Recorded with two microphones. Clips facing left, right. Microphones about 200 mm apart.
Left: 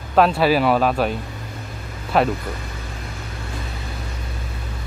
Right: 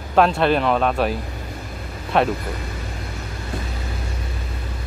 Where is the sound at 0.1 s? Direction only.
5° left (ahead or behind).